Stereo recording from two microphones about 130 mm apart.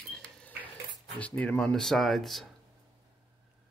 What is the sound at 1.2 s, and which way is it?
Speech, 10° left (ahead or behind).